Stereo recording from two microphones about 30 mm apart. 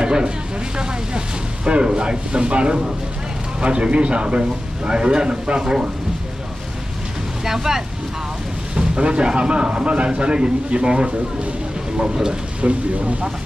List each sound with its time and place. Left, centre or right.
0.0 s a sound: right
0.7 s speech: right
7.4 s speech: centre
8.7 s speech: right
12.6 s speech: right